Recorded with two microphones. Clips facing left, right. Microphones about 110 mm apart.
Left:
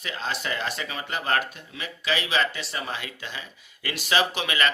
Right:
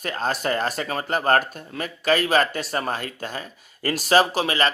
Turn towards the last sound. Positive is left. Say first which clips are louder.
# right 5 dB
turn(degrees=-35)  # may be behind; listen again after turning